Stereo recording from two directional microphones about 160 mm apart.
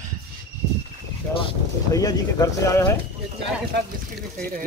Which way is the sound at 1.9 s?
20° left (ahead or behind).